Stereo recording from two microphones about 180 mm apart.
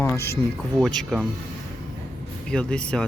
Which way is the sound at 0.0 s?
15° left (ahead or behind).